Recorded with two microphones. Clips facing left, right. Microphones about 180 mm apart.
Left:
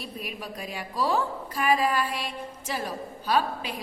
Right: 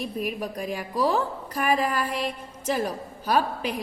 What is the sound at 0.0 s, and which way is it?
A woman's voice, 45° right (ahead or behind).